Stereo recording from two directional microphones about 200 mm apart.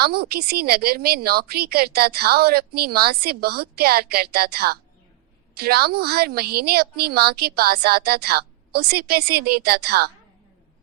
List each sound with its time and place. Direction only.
0.0 s a woman's voice: 50° right (ahead or behind)